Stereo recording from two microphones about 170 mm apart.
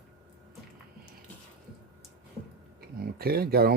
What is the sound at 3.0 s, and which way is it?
Speech, 65° right (ahead or behind).